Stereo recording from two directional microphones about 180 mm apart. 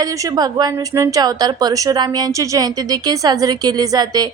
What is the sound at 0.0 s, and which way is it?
Speech, 20° right (ahead or behind).